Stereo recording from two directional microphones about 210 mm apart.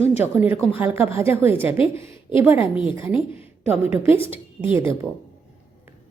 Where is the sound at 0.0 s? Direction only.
30° left (ahead or behind).